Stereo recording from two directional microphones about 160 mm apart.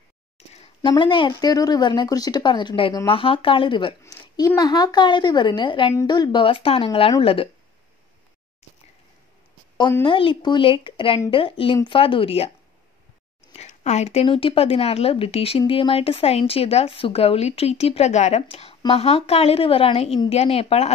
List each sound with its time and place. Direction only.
0.8 s speech: 30° left (ahead or behind)
4.0 s a sound: 25° left (ahead or behind)
4.5 s speech: 25° left (ahead or behind)
10.0 s speech: 30° left (ahead or behind)
13.5 s speech: 45° left (ahead or behind)